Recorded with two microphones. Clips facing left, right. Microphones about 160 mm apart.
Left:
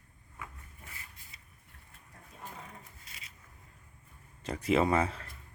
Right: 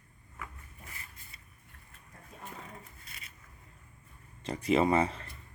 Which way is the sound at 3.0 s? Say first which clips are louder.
Right 1 dB; 55° right (ahead or behind).